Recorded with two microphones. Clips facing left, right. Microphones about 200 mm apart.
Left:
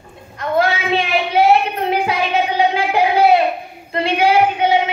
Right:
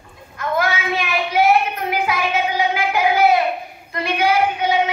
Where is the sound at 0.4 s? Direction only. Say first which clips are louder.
Left 4 dB; 30° left (ahead or behind).